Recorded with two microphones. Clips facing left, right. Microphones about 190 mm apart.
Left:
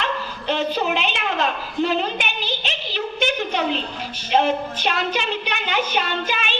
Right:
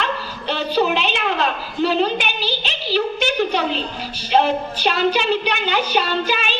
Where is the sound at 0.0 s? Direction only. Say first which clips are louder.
Right 1 dB; 35° right (ahead or behind).